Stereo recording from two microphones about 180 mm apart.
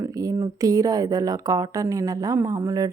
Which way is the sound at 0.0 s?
20° right (ahead or behind).